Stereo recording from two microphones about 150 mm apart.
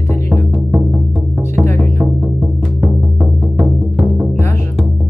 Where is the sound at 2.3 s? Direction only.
5° right (ahead or behind).